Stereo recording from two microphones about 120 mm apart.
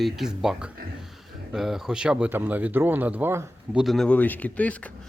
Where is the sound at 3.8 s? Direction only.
Centre (ahead or behind).